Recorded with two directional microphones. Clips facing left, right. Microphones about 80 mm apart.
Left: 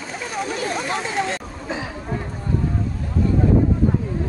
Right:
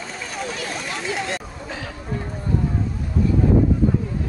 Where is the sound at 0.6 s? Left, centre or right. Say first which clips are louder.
Left 5 dB; left.